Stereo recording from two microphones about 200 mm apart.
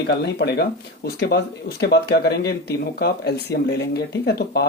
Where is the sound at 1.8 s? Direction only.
55° left (ahead or behind).